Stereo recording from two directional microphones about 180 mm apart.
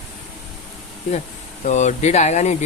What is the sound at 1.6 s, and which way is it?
Speech, 40° left (ahead or behind).